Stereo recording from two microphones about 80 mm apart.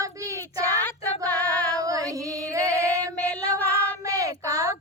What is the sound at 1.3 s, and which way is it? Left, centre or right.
Female singing, left.